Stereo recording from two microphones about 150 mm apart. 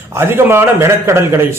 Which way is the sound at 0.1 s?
15° right (ahead or behind).